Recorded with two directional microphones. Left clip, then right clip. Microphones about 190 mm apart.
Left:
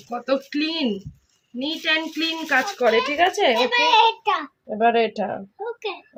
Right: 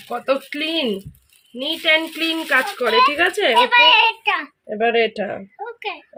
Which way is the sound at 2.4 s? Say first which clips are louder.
Even; 45° right (ahead or behind).